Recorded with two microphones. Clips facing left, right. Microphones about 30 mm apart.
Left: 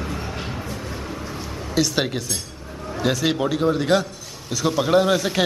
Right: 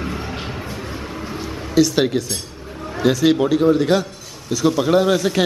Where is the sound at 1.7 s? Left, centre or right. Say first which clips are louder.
Right 6 dB; centre.